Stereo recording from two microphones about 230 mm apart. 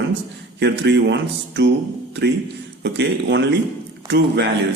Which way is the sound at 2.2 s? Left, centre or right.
Right.